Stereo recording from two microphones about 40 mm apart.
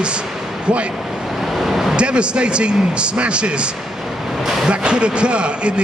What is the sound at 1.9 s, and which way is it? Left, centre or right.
A man's voice, right.